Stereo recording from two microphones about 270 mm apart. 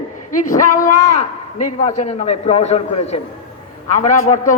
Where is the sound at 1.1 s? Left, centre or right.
Left.